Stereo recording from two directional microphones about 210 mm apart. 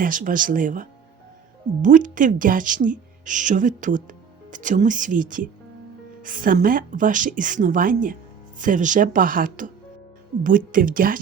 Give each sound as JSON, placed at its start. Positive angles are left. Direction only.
{"t": 0.0, "sound": "speech", "side_deg": -40}